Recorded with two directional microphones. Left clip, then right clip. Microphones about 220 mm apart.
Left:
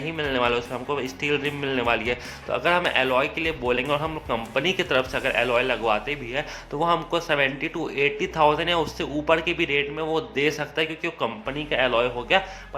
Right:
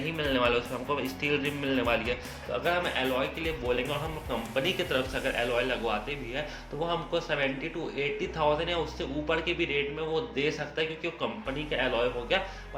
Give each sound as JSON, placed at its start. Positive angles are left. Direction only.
{"t": 0.2, "sound": "speech", "side_deg": 20}